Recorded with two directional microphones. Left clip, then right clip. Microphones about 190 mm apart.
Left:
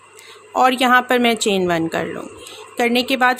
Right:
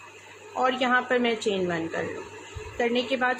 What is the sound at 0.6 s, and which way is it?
Speech, 50° left (ahead or behind).